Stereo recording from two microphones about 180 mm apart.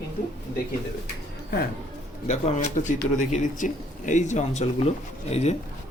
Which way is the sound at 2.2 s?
40° left (ahead or behind).